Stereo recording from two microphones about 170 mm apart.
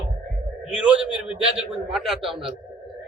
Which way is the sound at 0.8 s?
5° right (ahead or behind).